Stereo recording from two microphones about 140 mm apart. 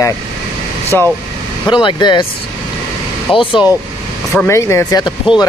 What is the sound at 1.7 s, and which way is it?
Speech, 35° left (ahead or behind).